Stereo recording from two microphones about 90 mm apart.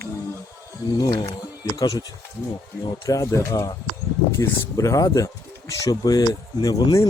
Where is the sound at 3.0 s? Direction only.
40° left (ahead or behind).